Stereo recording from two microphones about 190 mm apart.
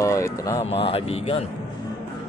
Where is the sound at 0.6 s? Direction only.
30° left (ahead or behind).